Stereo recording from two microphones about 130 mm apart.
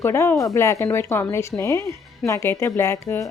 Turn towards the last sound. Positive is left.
turn(degrees=20)  # may be behind; listen again after turning